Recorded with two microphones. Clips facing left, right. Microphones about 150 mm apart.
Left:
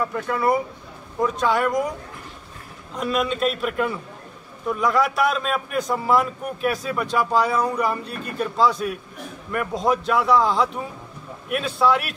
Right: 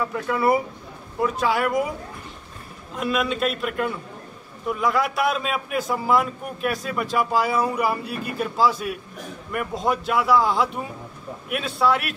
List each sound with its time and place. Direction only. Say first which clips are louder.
0.0 s a man's voice: even; 5° right (ahead or behind)
3.0 s a man's voice: left 1 dB; 5° right (ahead or behind)